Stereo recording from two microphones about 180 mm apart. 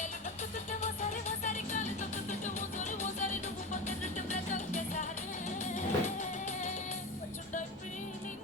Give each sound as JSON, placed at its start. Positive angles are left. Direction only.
{"t": 0.8, "sound": "music", "side_deg": 40}